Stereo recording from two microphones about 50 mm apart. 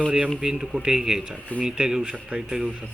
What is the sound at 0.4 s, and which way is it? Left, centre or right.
Speech, centre.